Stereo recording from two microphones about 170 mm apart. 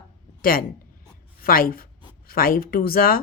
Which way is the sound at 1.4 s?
60° left (ahead or behind).